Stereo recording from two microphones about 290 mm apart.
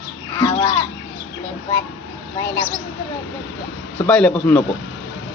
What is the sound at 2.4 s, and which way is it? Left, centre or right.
Speech, centre.